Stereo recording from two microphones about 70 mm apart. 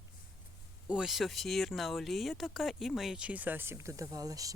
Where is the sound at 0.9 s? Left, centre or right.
Centre.